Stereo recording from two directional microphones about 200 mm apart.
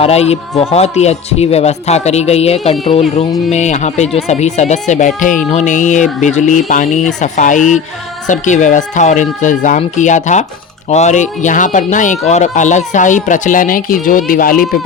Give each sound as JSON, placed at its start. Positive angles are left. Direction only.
{"t": 0.0, "sound": "speech", "side_deg": 30}